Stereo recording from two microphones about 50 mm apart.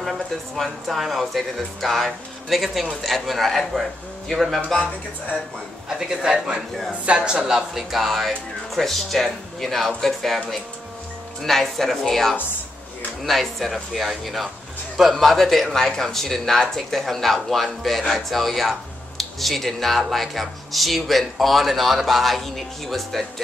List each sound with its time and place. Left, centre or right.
0.0 s speech: centre
5.9 s speech: centre
11.4 s speech: centre